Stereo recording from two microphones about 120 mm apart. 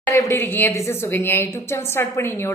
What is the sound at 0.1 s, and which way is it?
A woman's voice, 25° left (ahead or behind).